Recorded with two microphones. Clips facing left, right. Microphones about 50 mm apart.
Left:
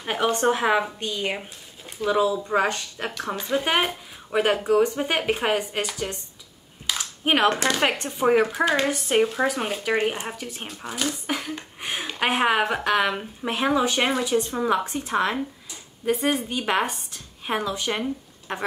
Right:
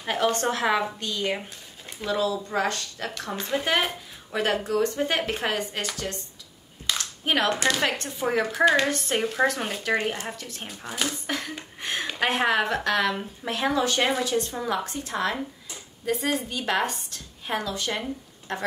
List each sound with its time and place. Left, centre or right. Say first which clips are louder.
0.0 s a woman's voice: left 2 dB; centre
3.3 s speech: left 2 dB; centre
7.4 s speech: left 3 dB; left
10.7 s speech: left 1 dB; centre
11.2 s speech: left 2 dB; centre
11.8 s a sound: right 1 dB; centre
12.2 s a woman's voice: left 2 dB; centre